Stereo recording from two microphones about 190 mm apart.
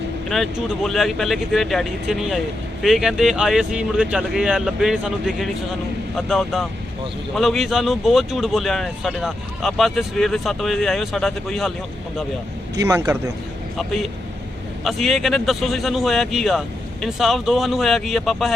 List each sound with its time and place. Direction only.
0.3 s speech: centre (ahead or behind)
12.8 s speech: 15° right (ahead or behind)
13.7 s speech: centre (ahead or behind)